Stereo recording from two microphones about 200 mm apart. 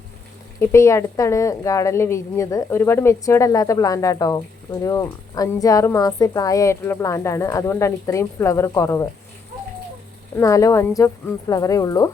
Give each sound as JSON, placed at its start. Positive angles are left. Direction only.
{"t": 0.6, "sound": "a woman's voice", "side_deg": 15}
{"t": 10.3, "sound": "a woman's voice", "side_deg": 15}